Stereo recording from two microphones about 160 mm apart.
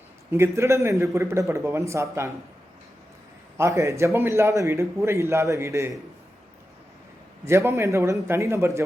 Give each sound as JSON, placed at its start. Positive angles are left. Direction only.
{"t": 0.3, "sound": "a man's voice", "side_deg": -15}
{"t": 3.6, "sound": "a man's voice", "side_deg": -20}
{"t": 7.4, "sound": "a man's voice", "side_deg": -15}